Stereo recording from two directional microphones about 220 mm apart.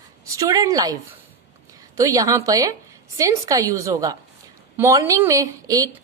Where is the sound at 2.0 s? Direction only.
15° right (ahead or behind).